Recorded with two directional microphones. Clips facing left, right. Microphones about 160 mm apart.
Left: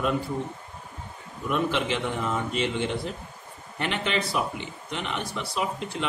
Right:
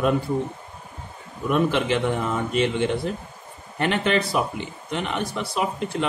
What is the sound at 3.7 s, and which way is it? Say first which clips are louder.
Speech: right 6 dB; 45° right (ahead or behind).